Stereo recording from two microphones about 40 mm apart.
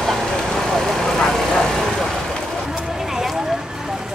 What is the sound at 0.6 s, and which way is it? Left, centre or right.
Vehicle, centre.